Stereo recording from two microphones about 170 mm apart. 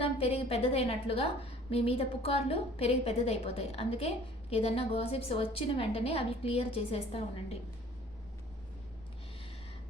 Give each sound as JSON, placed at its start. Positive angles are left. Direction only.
{"t": 0.0, "sound": "a woman's voice", "side_deg": 35}